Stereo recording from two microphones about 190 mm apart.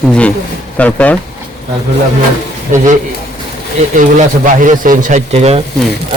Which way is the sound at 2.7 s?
40° right (ahead or behind).